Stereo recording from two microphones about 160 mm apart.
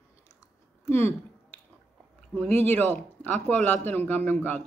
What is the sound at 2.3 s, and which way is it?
Speech, 15° left (ahead or behind).